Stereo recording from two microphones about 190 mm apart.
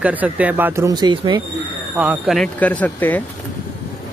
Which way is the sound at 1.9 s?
5° right (ahead or behind).